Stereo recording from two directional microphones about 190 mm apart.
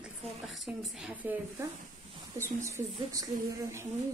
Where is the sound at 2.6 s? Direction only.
15° right (ahead or behind).